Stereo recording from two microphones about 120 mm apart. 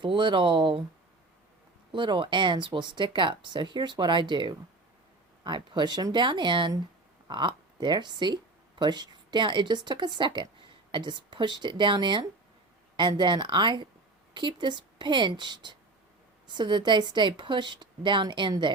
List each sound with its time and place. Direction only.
0.0 s speech: 45° right (ahead or behind)
1.9 s speech: 45° right (ahead or behind)